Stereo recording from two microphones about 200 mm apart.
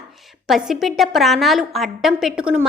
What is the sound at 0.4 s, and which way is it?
A woman's voice, centre (ahead or behind).